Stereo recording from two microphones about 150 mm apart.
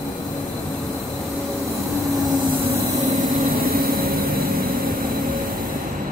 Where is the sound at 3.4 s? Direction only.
75° right (ahead or behind).